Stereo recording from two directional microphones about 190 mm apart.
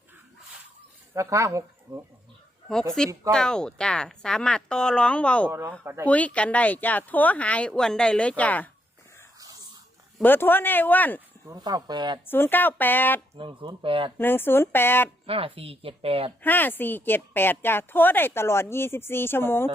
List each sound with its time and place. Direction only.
1.1 s speech: 15° right (ahead or behind)
3.0 s speech: 5° left (ahead or behind)
5.5 s speech: 15° right (ahead or behind)
6.1 s speech: 5° left (ahead or behind)
10.2 s speech: 10° left (ahead or behind)
11.4 s speech: 20° right (ahead or behind)
12.3 s speech: 10° left (ahead or behind)
13.3 s speech: 25° right (ahead or behind)
14.2 s speech: 10° left (ahead or behind)
15.3 s speech: 30° right (ahead or behind)
16.4 s speech: 10° left (ahead or behind)